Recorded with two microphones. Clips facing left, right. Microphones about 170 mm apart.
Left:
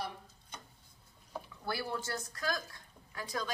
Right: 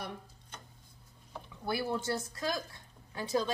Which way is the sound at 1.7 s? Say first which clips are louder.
Right 4 dB; 20° right (ahead or behind).